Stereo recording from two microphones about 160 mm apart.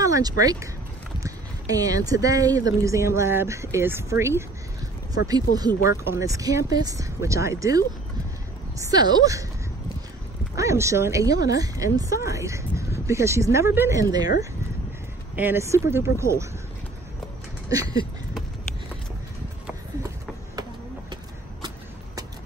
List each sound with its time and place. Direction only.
0.0 s speech: 20° right (ahead or behind)
10.5 s speech: 20° right (ahead or behind)
15.3 s speech: 15° right (ahead or behind)
17.6 s speech: 25° right (ahead or behind)
21.1 s vehicle: 25° right (ahead or behind)